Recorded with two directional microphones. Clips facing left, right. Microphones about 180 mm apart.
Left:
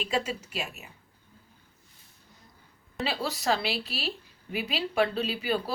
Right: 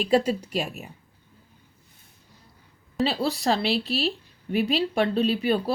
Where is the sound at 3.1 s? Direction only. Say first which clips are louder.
Right 2 dB; 35° right (ahead or behind).